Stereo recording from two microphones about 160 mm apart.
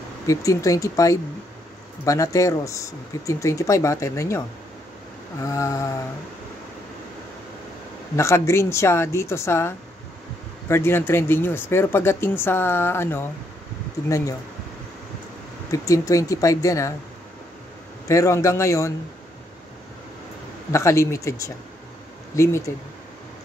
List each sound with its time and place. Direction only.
0.3 s speech: 20° left (ahead or behind)
5.4 s speech: 20° left (ahead or behind)
8.2 s speech: 15° left (ahead or behind)
15.7 s speech: 20° left (ahead or behind)
18.0 s speech: 20° left (ahead or behind)
20.7 s speech: 20° left (ahead or behind)